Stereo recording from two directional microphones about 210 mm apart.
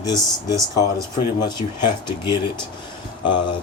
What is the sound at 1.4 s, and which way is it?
Speech, 20° left (ahead or behind).